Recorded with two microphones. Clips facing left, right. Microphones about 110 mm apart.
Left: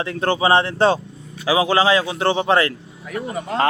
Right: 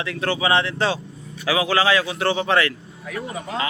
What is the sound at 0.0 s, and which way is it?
Speech, 35° left (ahead or behind).